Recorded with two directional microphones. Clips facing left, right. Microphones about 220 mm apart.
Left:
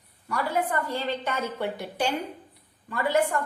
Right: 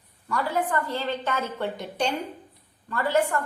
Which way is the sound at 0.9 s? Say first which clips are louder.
Right 1 dB; 10° left (ahead or behind).